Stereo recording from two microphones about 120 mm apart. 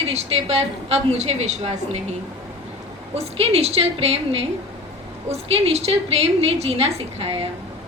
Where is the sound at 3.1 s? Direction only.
60° right (ahead or behind).